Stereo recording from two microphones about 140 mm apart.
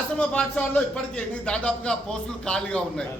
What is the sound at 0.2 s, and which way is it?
Speech, 10° left (ahead or behind).